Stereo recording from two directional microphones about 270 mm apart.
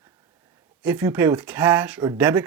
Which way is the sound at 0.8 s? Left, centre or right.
Centre.